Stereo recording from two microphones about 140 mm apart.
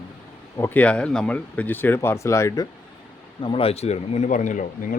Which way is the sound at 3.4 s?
40° left (ahead or behind).